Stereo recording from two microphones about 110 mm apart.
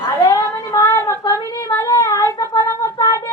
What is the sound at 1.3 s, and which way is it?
Female singing, 30° left (ahead or behind).